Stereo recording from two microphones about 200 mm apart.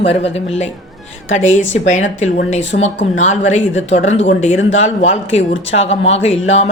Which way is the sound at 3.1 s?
35° left (ahead or behind).